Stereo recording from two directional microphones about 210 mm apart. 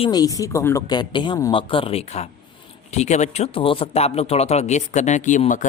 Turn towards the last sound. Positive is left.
turn(degrees=35)  # may be behind; listen again after turning